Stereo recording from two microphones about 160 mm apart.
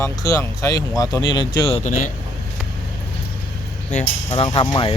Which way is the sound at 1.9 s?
55° left (ahead or behind).